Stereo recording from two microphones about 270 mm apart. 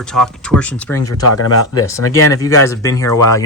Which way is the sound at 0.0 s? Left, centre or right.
Centre.